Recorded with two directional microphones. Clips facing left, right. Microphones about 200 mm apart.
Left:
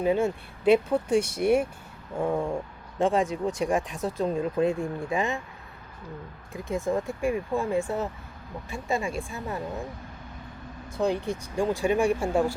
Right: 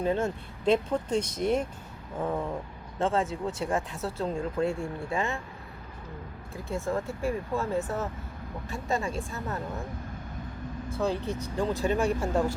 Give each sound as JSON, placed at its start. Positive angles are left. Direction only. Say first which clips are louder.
{"t": 0.0, "sound": "speech", "louder": "left 3 dB", "side_deg": 10}
{"t": 6.5, "sound": "speech", "louder": "left 3 dB", "side_deg": 15}
{"t": 10.8, "sound": "speech", "louder": "left 3 dB", "side_deg": 15}